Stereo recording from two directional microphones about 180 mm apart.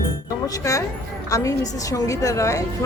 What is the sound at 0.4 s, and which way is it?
A woman's voice, 15° left (ahead or behind).